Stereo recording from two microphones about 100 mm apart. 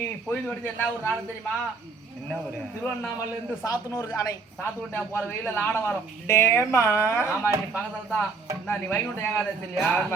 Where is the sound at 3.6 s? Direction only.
40° left (ahead or behind).